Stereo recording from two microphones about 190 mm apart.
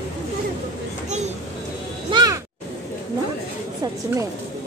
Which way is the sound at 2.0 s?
20° right (ahead or behind).